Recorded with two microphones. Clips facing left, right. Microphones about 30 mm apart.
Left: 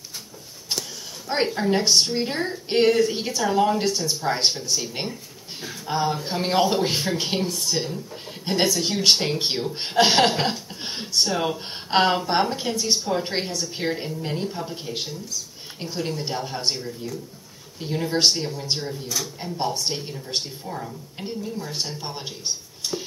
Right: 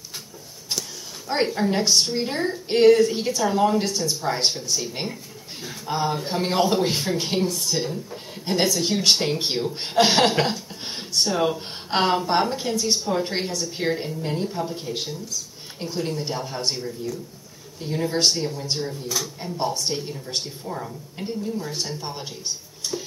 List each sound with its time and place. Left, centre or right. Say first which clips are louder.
1.2 s a woman's voice: right 1 dB; centre
19.0 s a woman's voice: right 1 dB; centre
20.6 s a woman's voice: right 1 dB; centre
21.2 s a woman's voice: right 2 dB; left
21.8 s a woman's voice: right 1 dB; centre
22.8 s a sound: right 2 dB; left